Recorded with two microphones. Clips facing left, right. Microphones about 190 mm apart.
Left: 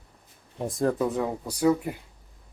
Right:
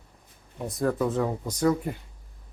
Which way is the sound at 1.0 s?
10° left (ahead or behind).